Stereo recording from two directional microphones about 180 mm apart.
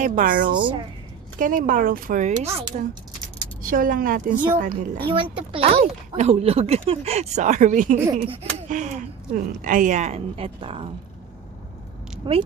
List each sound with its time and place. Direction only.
0.0 s speech: 50° right (ahead or behind)
0.5 s speech: 25° right (ahead or behind)
1.4 s speech: 50° right (ahead or behind)
3.6 s speech: 50° right (ahead or behind)
5.0 s speech: 30° right (ahead or behind); by 7.9 s 45° right (ahead or behind)
8.2 s speech: 35° right (ahead or behind)
12.2 s speech: 25° right (ahead or behind)